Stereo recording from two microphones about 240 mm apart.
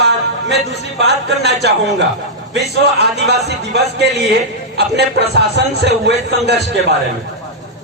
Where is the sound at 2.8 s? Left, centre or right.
Right.